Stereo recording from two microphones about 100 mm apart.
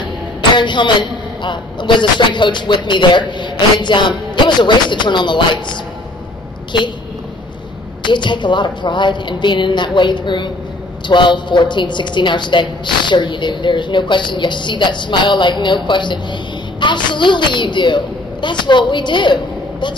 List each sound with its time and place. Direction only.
0.4 s a woman's voice: 50° left (ahead or behind)
8.0 s a woman's voice: 50° left (ahead or behind)